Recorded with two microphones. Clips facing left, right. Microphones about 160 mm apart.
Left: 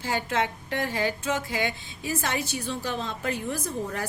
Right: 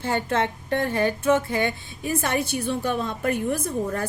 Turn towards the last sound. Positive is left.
turn(degrees=-55)  # may be behind; listen again after turning